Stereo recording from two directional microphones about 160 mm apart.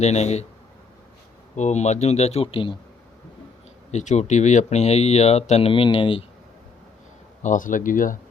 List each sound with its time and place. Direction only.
0.0 s speech: 45° left (ahead or behind)
1.5 s speech: 45° left (ahead or behind)
3.9 s speech: 45° left (ahead or behind)
7.4 s speech: 55° left (ahead or behind)